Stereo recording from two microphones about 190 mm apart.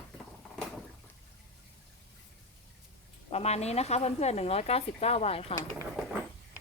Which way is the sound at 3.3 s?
35° left (ahead or behind).